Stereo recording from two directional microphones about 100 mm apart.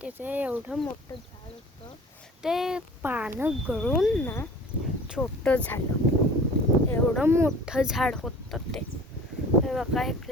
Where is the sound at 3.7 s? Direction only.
5° left (ahead or behind).